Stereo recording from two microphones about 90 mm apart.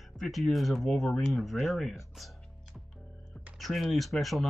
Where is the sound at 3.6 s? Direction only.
Centre (ahead or behind).